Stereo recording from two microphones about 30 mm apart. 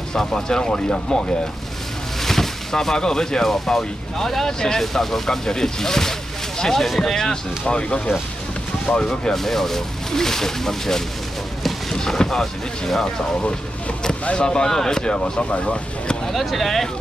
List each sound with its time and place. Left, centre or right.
0.1 s speech: left
2.2 s a sound: centre
3.6 s speech: centre
7.6 s speech: left
8.9 s speech: left
9.3 s speech: centre
12.3 s speech: centre
14.4 s speech: left
14.7 s speech: centre
15.0 s speech: left
16.3 s speech: centre